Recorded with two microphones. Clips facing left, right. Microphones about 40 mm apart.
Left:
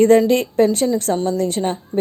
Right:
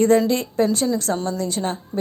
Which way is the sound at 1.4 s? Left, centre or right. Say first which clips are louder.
Left 5 dB; left.